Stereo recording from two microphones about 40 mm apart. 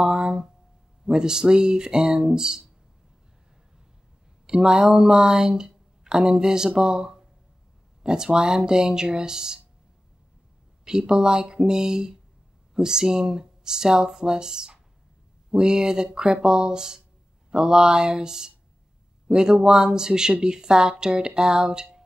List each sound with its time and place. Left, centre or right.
0.0 s a sound: centre
1.0 s speech: centre
4.5 s speech: centre
10.9 s speech: centre